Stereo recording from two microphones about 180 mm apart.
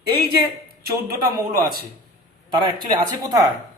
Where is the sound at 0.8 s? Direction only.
55° right (ahead or behind).